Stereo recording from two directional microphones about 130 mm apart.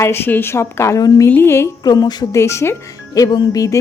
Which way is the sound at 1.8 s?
30° left (ahead or behind).